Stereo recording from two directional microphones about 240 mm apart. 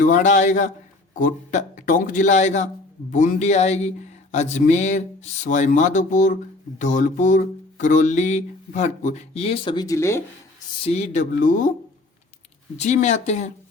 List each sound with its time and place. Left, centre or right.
0.0 s speech: left; by 10.2 s centre
10.8 s speech: left
12.7 s speech: left